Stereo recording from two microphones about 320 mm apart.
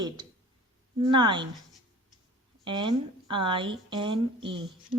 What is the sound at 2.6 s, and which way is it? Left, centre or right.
A woman's voice, centre.